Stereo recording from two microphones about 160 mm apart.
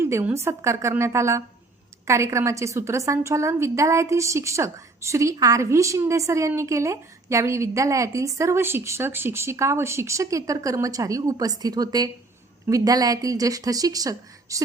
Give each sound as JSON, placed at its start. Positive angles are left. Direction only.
{"t": 0.0, "sound": "a woman's voice", "side_deg": -15}